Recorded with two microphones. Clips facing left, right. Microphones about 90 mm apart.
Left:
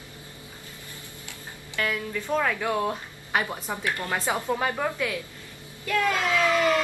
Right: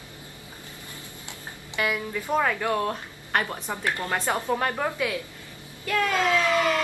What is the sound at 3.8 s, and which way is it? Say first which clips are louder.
Speech: right 2 dB; 20° right (ahead or behind).